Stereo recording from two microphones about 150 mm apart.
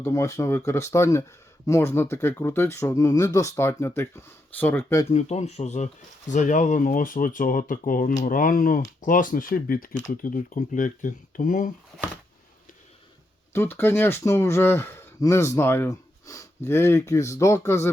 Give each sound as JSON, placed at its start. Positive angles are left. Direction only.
{"t": 0.0, "sound": "speech", "side_deg": 20}
{"t": 5.1, "sound": "speech", "side_deg": 50}
{"t": 13.5, "sound": "speech", "side_deg": 15}